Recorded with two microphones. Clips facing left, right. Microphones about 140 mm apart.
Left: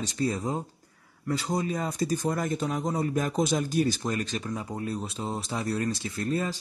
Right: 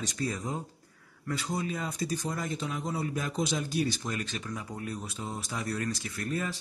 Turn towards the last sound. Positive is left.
turn(degrees=30)  # may be behind; listen again after turning